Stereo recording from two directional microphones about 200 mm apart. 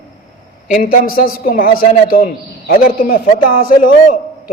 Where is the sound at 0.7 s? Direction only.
45° left (ahead or behind).